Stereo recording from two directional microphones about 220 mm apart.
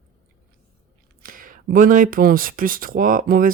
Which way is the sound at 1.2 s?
40° right (ahead or behind).